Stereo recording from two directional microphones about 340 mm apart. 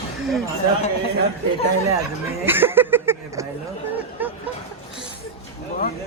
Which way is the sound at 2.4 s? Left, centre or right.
Centre.